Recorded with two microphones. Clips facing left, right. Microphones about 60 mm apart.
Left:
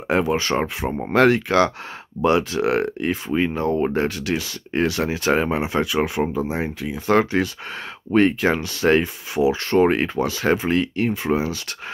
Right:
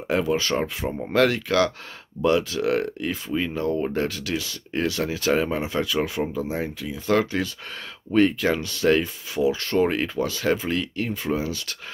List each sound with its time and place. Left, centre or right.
0.1 s speech: left